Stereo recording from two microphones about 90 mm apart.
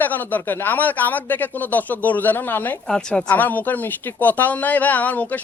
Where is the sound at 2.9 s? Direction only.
5° left (ahead or behind).